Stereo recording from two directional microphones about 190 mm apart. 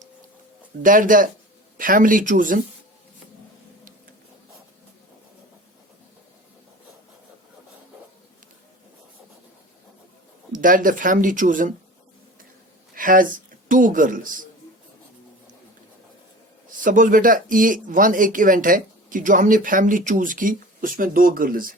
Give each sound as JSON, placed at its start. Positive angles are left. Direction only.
{"t": 0.8, "sound": "speech", "side_deg": -45}
{"t": 10.5, "sound": "speech", "side_deg": -45}
{"t": 12.9, "sound": "speech", "side_deg": -45}
{"t": 16.8, "sound": "speech", "side_deg": -45}